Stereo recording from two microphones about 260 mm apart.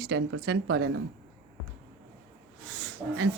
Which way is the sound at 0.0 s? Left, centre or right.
Right.